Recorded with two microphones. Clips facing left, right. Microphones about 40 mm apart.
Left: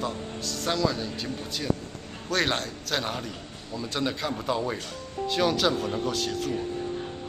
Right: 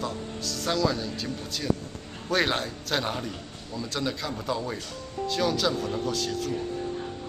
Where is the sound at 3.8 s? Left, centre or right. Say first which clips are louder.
Left 1 dB; centre.